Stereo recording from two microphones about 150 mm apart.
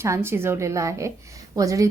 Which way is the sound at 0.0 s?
15° right (ahead or behind).